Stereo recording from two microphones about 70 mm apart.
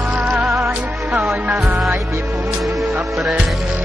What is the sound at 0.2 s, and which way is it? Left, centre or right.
Music, centre.